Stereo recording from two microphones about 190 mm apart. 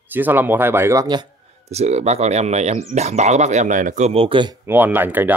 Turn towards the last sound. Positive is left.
turn(degrees=-10)  # may be behind; listen again after turning